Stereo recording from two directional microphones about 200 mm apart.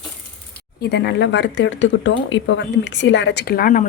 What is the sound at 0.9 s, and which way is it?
Speech, 60° left (ahead or behind).